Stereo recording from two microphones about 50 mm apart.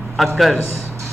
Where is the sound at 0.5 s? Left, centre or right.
Right.